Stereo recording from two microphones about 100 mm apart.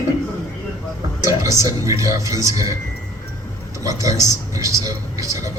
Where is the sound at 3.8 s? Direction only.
35° right (ahead or behind).